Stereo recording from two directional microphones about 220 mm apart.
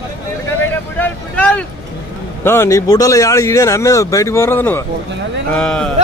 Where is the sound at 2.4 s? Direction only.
10° left (ahead or behind).